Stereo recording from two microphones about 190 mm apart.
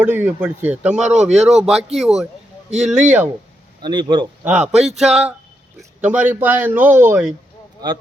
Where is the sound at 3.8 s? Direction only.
25° right (ahead or behind).